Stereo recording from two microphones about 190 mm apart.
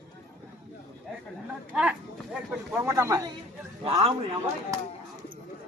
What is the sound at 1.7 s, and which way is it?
Speech, 5° right (ahead or behind).